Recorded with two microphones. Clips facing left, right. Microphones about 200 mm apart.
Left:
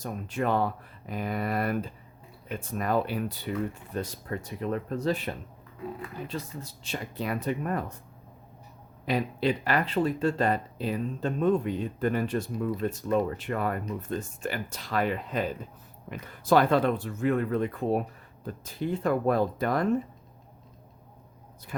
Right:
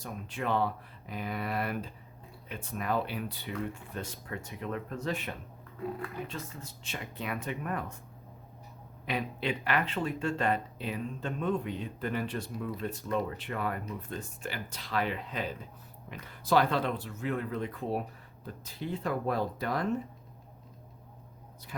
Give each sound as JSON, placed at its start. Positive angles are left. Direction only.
{"t": 0.0, "sound": "speech", "side_deg": 45}
{"t": 6.6, "sound": "speech", "side_deg": 35}
{"t": 9.0, "sound": "speech", "side_deg": 35}